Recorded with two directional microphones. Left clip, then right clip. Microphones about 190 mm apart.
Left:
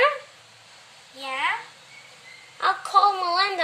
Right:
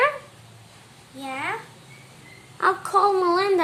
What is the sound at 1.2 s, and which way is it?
Speech, 35° right (ahead or behind).